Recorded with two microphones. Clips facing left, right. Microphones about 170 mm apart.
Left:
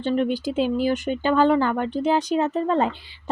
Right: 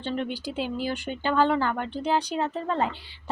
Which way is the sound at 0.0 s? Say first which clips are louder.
Left 8 dB; 15° left (ahead or behind).